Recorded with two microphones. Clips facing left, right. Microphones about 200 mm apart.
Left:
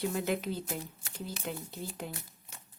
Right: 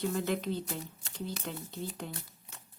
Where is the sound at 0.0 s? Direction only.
10° left (ahead or behind).